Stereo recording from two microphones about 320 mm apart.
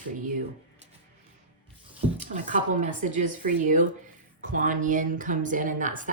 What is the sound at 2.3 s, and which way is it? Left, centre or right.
Speech, right.